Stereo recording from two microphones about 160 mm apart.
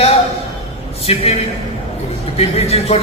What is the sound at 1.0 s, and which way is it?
Speech, 40° left (ahead or behind).